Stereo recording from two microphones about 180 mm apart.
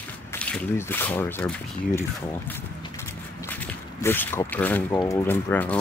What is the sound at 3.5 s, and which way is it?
Speech, 10° left (ahead or behind).